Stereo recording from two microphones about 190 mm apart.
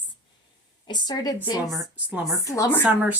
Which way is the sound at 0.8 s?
25° left (ahead or behind).